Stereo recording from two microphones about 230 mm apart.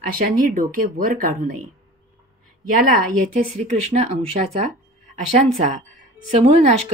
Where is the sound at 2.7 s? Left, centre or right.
Right.